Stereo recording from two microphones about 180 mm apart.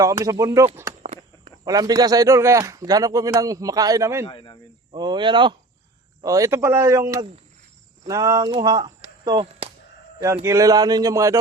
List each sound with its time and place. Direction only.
0.0 s speech: 20° right (ahead or behind)
1.0 s walk: 40° right (ahead or behind)
1.6 s a man's voice: 20° right (ahead or behind)
4.3 s speech: 25° left (ahead or behind)
4.9 s a man's voice: 25° right (ahead or behind)